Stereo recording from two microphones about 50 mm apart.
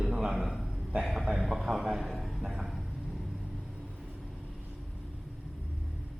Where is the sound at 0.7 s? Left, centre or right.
Right.